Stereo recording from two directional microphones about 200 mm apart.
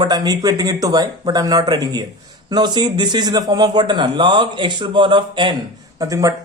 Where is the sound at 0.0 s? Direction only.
20° right (ahead or behind).